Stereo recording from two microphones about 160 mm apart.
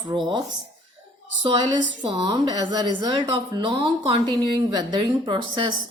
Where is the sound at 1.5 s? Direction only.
30° right (ahead or behind).